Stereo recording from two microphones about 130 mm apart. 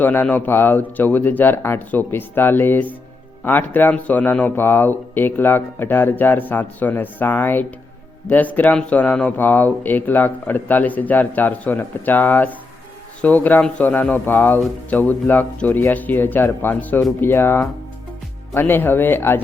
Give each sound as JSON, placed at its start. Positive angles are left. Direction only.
{"t": 0.0, "sound": "speech", "side_deg": 15}